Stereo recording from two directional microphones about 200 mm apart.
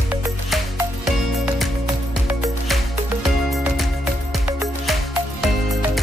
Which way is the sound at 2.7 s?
Centre (ahead or behind).